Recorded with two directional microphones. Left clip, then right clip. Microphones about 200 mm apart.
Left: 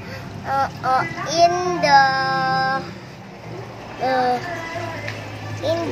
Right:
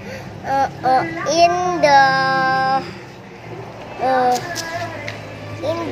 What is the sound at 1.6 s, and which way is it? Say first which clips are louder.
Child singing: right 2 dB; 5° right (ahead or behind).